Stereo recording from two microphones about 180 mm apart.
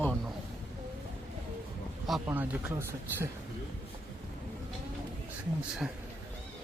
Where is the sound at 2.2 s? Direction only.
10° right (ahead or behind).